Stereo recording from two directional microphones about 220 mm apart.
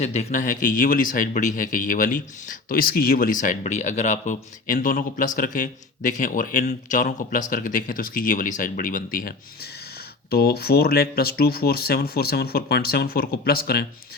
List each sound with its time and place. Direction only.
0.0 s speech: 30° left (ahead or behind)